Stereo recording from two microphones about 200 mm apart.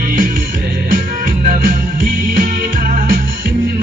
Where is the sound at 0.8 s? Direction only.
45° right (ahead or behind).